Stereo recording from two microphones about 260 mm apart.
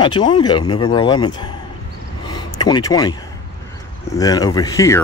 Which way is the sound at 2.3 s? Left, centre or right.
Centre.